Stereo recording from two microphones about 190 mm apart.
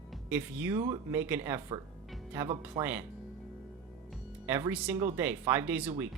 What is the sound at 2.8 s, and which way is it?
Speech, 35° right (ahead or behind).